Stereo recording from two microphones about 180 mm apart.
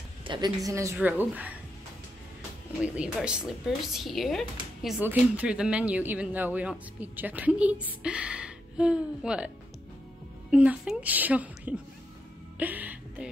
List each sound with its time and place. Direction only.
0.2 s a sound: 25° right (ahead or behind)
0.7 s speech: 15° right (ahead or behind)
2.8 s speech: 5° right (ahead or behind)
10.5 s speech: 5° right (ahead or behind)
12.5 s music: 10° right (ahead or behind)